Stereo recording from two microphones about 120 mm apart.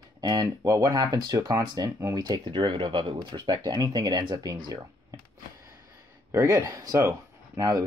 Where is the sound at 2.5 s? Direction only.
40° right (ahead or behind).